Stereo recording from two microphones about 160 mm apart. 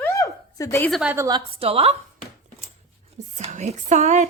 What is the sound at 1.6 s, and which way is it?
Speech, 40° right (ahead or behind).